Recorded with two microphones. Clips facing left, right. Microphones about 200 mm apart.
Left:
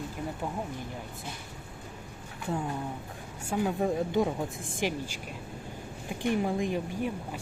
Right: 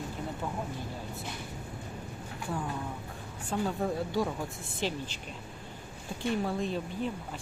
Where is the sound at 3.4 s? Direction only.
10° left (ahead or behind).